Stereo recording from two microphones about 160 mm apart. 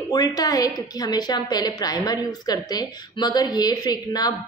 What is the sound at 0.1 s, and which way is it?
A woman's voice, 25° left (ahead or behind).